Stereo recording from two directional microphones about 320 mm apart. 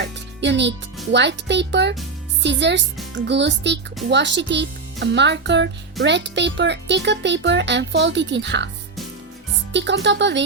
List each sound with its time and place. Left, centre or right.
0.0 s music: right
1.1 s a child's voice: right
9.7 s a child's voice: right